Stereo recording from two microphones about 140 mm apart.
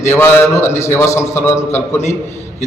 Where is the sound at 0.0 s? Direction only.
15° left (ahead or behind).